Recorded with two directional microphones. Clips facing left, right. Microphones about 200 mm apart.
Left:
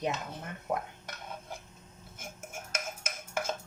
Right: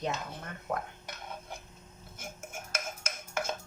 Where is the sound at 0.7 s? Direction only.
10° left (ahead or behind).